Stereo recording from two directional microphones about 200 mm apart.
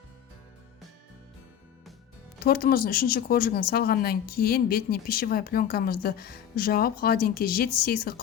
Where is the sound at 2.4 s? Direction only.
50° left (ahead or behind).